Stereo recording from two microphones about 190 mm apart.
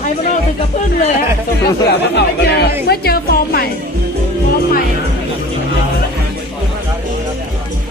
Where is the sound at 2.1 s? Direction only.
60° left (ahead or behind).